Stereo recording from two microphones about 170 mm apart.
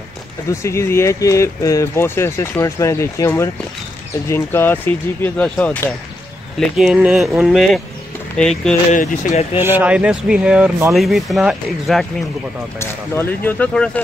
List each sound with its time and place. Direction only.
0.5 s speech: 15° left (ahead or behind)
6.6 s speech: 5° right (ahead or behind)
8.9 s speech: 50° left (ahead or behind)
9.6 s speech: 10° right (ahead or behind)
12.7 s speech: 15° left (ahead or behind)